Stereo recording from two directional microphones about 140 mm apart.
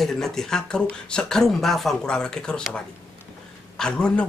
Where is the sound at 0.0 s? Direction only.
5° left (ahead or behind).